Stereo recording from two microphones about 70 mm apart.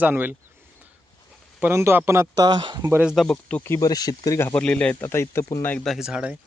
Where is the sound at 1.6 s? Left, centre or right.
Right.